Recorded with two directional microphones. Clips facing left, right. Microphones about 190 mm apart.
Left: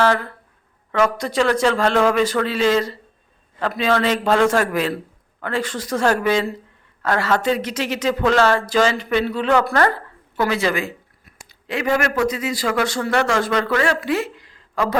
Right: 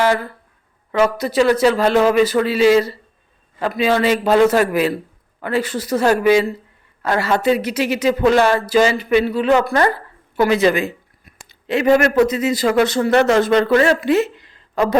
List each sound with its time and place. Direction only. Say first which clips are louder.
0.0 s a man's voice: right 1 dB; 10° right (ahead or behind)